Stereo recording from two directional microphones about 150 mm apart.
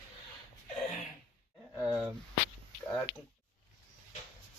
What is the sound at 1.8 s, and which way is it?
Speech, 5° right (ahead or behind).